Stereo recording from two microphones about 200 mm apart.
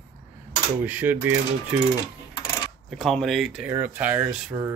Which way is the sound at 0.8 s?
10° right (ahead or behind).